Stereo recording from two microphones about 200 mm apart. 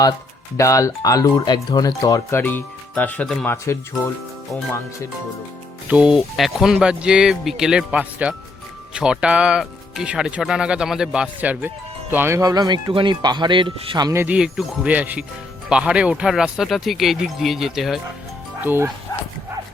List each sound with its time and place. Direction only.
0.5 s speech: 15° left (ahead or behind)
5.9 s speech: 5° right (ahead or behind)
19.1 s dog: 20° left (ahead or behind)